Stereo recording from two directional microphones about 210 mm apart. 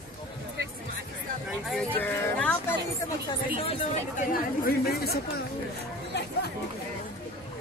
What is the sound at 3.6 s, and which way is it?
Chatter, 25° left (ahead or behind).